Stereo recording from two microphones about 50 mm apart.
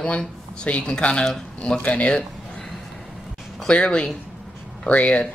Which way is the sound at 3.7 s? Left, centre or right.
Left.